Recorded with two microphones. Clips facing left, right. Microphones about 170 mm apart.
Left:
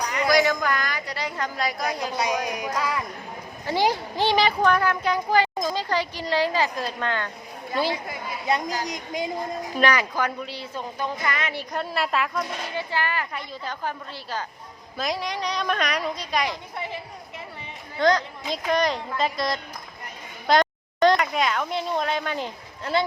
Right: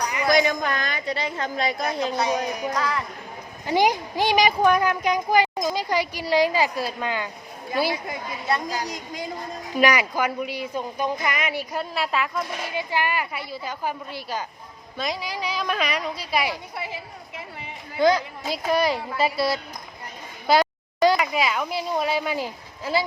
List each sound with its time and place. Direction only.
0.3 s a woman's voice: 20° right (ahead or behind)
2.6 s speech: 10° left (ahead or behind)
3.7 s speech: 15° right (ahead or behind)
8.4 s a woman's voice: 20° left (ahead or behind)
9.7 s speech: 10° right (ahead or behind)
14.9 s a woman's voice: centre (ahead or behind)